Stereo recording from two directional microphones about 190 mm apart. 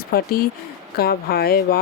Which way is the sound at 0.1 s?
50° left (ahead or behind).